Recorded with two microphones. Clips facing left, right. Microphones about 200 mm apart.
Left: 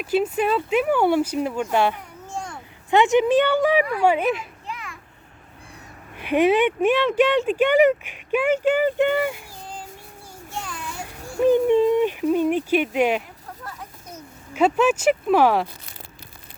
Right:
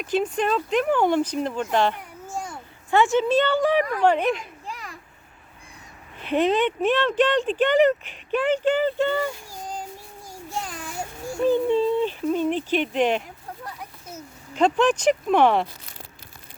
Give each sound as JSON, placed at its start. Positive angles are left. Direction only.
{"t": 0.0, "sound": "speech", "side_deg": 5}
{"t": 2.2, "sound": "a sound", "side_deg": -5}
{"t": 2.9, "sound": "speech", "side_deg": 20}
{"t": 4.6, "sound": "children playing", "side_deg": -40}
{"t": 6.1, "sound": "speech", "side_deg": 10}
{"t": 10.5, "sound": "a sound", "side_deg": -40}
{"t": 11.4, "sound": "speech", "side_deg": 15}
{"t": 14.5, "sound": "speech", "side_deg": 5}